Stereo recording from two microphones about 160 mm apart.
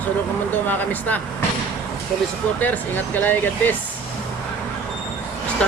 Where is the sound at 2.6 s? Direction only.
10° left (ahead or behind).